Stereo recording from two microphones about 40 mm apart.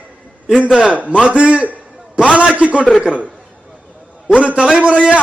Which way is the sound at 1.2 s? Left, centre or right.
Right.